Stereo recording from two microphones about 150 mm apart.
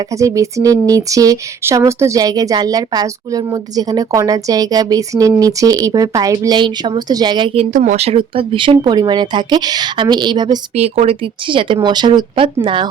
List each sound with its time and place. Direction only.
0.1 s speech: 20° right (ahead or behind); by 7.7 s 35° right (ahead or behind)
7.7 s speech: 55° right (ahead or behind); by 10.6 s 30° right (ahead or behind)
10.8 s speech: 40° right (ahead or behind)